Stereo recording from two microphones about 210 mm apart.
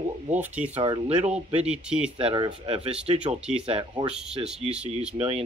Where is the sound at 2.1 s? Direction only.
25° right (ahead or behind).